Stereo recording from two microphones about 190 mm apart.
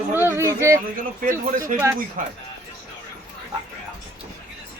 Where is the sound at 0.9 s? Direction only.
45° right (ahead or behind).